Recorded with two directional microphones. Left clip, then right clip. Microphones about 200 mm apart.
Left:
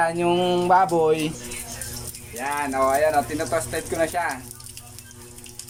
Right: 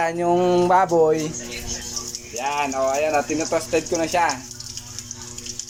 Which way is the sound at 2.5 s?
10° right (ahead or behind).